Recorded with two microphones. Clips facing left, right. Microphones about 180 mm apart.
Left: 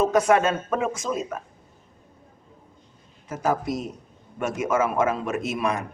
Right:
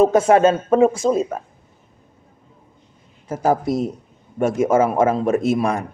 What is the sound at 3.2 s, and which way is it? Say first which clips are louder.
Speech: right 6 dB; 30° right (ahead or behind).